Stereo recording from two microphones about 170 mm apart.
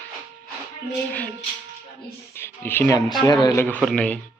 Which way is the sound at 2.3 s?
15° left (ahead or behind).